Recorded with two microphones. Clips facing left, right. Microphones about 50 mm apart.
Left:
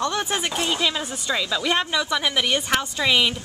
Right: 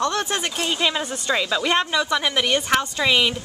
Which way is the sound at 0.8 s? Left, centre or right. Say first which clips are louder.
Right 2 dB; centre.